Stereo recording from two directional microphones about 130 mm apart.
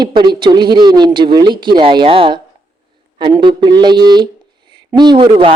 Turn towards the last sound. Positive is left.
turn(degrees=-40)  # may be behind; listen again after turning